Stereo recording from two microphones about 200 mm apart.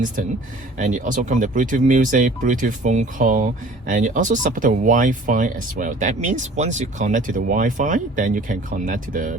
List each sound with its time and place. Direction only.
0.8 s speech: 40° right (ahead or behind)